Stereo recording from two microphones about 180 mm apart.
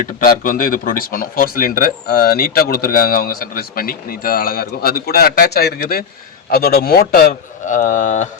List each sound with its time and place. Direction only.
0.2 s a man's voice: 50° left (ahead or behind)